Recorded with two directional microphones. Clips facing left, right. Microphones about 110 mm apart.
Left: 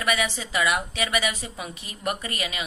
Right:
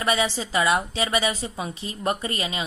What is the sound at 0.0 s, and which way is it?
A woman's voice, 30° right (ahead or behind).